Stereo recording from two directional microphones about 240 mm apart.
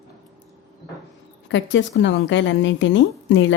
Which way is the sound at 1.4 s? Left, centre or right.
Left.